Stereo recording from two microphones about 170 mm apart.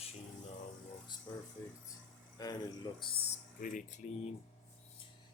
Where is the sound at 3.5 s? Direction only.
50° left (ahead or behind).